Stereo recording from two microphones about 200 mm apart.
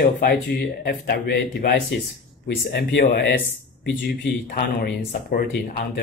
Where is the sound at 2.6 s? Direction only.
60° left (ahead or behind).